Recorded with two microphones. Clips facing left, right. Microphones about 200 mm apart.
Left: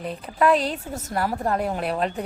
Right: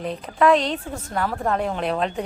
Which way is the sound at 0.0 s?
5° left (ahead or behind).